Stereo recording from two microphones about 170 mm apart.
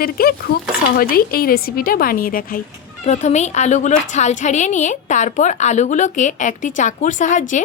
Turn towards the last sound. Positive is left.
turn(degrees=45)  # may be behind; listen again after turning